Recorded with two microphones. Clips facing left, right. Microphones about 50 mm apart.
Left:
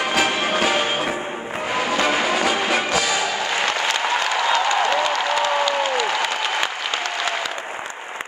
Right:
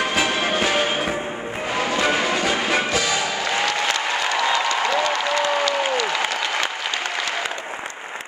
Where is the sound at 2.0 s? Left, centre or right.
Centre.